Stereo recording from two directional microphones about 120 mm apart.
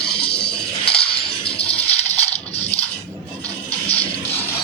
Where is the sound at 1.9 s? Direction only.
60° left (ahead or behind).